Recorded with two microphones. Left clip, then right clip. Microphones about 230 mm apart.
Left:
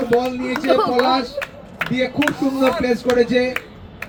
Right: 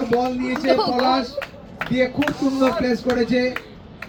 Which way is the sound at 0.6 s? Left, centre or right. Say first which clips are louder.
Left 2 dB; centre.